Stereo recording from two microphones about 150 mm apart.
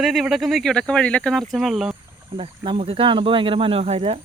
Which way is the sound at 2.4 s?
40° right (ahead or behind).